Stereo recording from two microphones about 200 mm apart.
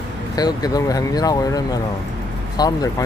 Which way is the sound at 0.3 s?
20° left (ahead or behind).